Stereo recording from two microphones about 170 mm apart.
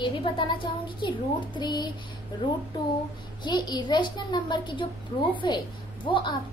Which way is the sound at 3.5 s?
25° left (ahead or behind).